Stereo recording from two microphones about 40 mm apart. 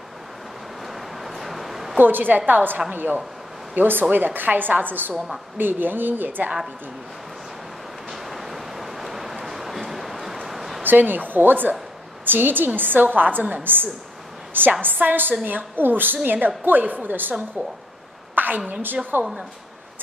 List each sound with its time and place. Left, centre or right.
1.2 s vehicle: centre
2.0 s a woman's voice: right
8.1 s a sound: centre
10.8 s a woman's voice: right
18.3 s a sound: right
18.7 s a woman's voice: right